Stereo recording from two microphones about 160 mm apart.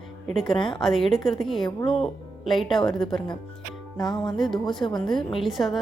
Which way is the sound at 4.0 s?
25° left (ahead or behind).